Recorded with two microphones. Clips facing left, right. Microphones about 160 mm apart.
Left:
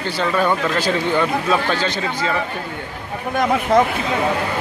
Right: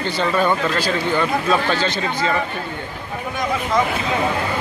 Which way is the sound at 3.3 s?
60° left (ahead or behind).